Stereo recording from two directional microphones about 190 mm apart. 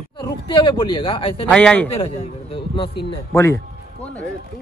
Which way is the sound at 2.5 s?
25° left (ahead or behind).